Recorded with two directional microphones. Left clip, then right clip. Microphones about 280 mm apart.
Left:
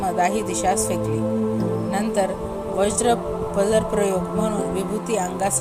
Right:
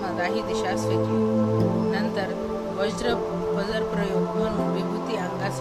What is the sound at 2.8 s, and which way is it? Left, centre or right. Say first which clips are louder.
A man's voice: left 6 dB; centre.